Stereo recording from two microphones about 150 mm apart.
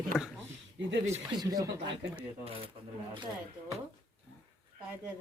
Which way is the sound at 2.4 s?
40° right (ahead or behind).